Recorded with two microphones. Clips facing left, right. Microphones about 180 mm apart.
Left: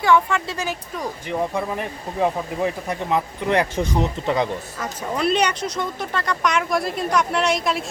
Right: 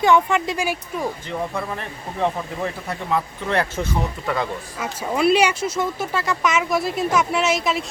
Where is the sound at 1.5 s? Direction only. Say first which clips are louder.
Left 3 dB; 15° left (ahead or behind).